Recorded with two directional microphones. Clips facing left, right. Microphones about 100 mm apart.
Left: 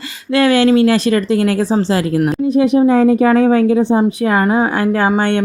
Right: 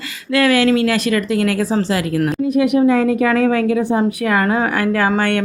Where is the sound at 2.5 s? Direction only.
30° left (ahead or behind).